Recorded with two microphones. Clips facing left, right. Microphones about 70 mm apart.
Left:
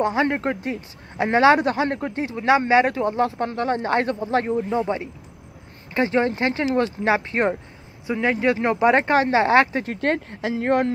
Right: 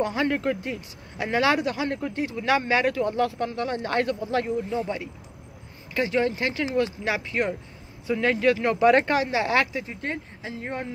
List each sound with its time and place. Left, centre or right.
0.0 s speech: left
8.1 s speech: centre
9.1 s speech: left
9.8 s speech: left